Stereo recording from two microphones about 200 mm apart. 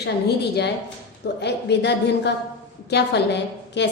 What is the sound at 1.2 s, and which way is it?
A woman's voice, 60° left (ahead or behind).